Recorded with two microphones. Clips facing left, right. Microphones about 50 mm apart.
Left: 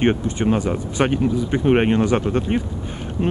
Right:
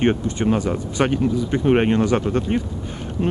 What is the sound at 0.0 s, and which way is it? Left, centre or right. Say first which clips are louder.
Speech: even; centre.